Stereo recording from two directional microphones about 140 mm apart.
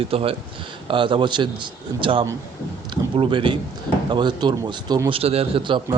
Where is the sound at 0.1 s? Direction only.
40° right (ahead or behind).